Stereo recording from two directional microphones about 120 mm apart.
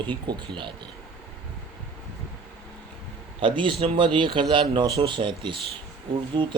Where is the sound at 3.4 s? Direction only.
45° right (ahead or behind).